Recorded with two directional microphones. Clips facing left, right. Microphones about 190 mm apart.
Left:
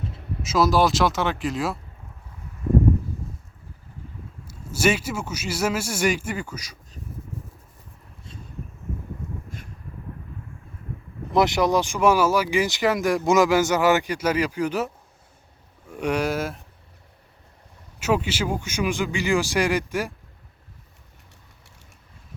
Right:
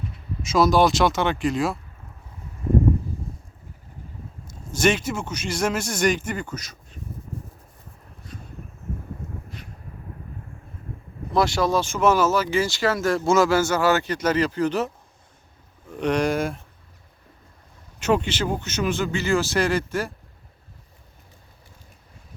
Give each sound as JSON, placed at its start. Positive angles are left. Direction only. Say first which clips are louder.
{"t": 0.4, "sound": "speech", "louder": "right 2 dB", "side_deg": 5}
{"t": 4.4, "sound": "speech", "louder": "right 1 dB", "side_deg": 5}
{"t": 11.3, "sound": "speech", "louder": "left 1 dB", "side_deg": 20}
{"t": 18.0, "sound": "speech", "louder": "right 1 dB", "side_deg": 5}